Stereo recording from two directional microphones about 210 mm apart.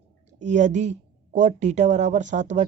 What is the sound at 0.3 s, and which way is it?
Speech, 35° right (ahead or behind).